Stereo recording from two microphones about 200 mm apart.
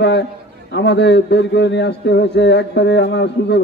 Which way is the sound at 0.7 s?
60° left (ahead or behind).